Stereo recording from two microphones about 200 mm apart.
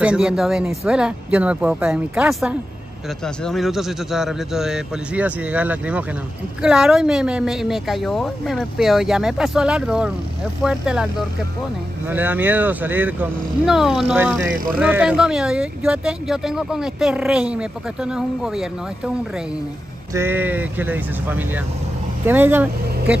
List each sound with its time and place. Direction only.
0.0 s speech: 5° right (ahead or behind)
12.1 s speech: 10° right (ahead or behind)
20.2 s speech: 10° right (ahead or behind)